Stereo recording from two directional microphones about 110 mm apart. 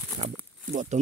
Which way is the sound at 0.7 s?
90° right.